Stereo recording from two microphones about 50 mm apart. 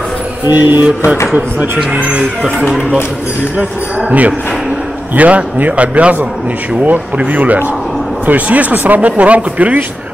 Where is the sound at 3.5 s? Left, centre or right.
Right.